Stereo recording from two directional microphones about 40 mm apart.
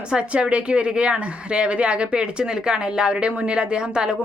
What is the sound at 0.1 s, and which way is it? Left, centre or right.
A woman's voice, right.